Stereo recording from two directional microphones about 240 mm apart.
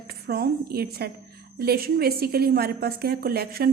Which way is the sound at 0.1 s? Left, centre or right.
Right.